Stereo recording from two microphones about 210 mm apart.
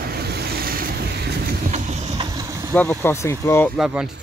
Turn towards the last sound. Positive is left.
turn(degrees=0)  # may be behind; listen again after turning